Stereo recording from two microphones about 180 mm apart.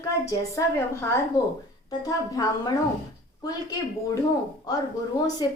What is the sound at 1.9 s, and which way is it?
A woman's voice, 20° left (ahead or behind).